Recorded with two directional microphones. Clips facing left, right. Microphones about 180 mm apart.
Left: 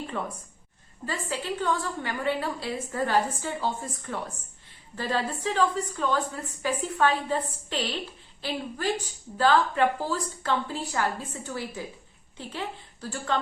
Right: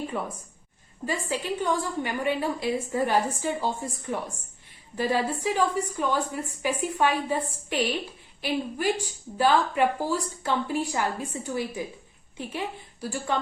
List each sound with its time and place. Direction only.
0.2 s a woman's voice: 10° right (ahead or behind)